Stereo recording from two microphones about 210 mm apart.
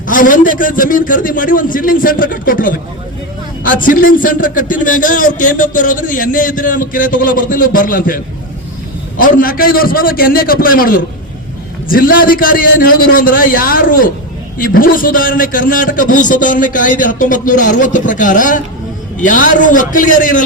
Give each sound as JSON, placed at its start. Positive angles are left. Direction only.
{"t": 0.1, "sound": "a man's voice", "side_deg": 40}
{"t": 9.2, "sound": "a man's voice", "side_deg": 45}